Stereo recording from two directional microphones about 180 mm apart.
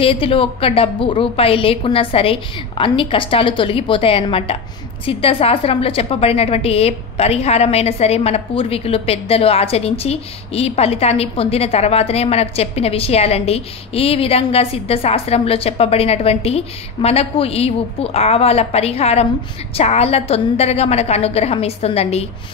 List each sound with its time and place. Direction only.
0.0 s a woman's voice: 30° left (ahead or behind)